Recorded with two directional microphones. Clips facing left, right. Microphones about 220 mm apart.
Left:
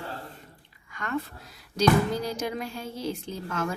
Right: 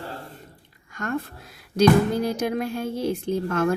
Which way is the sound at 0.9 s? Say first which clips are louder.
Right 3 dB; 45° right (ahead or behind).